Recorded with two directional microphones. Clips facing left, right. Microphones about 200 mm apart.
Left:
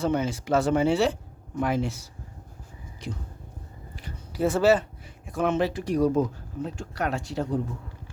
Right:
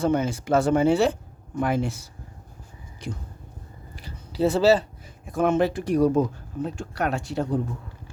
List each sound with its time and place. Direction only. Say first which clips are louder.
0.0 s speech: right 3 dB; 50° right (ahead or behind)
4.0 s speech: right 3 dB; 35° right (ahead or behind)
5.4 s speech: right 3 dB; 50° right (ahead or behind)